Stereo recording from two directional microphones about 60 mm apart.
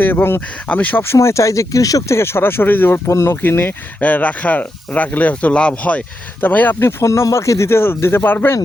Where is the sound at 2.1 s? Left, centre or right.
Left.